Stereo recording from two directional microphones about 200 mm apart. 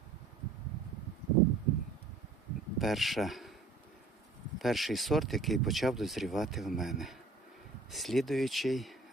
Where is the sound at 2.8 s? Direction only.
Centre (ahead or behind).